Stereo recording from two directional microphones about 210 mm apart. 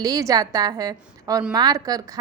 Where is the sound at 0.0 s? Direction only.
15° right (ahead or behind).